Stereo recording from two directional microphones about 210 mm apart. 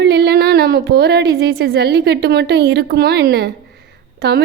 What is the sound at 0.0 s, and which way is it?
A woman's voice, 50° right (ahead or behind).